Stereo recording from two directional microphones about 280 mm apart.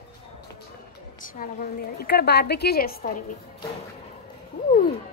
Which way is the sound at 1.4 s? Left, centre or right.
Left.